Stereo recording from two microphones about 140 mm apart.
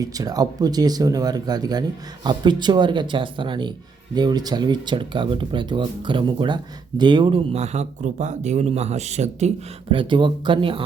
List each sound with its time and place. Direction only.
0.0 s speech: 25° right (ahead or behind); by 9.5 s 55° right (ahead or behind)
9.9 s speech: 35° right (ahead or behind)